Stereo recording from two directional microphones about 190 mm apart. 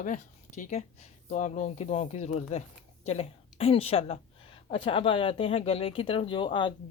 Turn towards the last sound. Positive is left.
turn(degrees=25)  # may be behind; listen again after turning